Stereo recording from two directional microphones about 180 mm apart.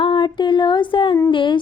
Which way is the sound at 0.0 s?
25° left (ahead or behind).